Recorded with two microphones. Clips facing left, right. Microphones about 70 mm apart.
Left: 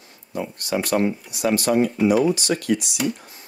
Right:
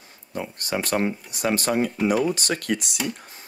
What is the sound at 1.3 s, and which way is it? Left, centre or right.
Speech, right.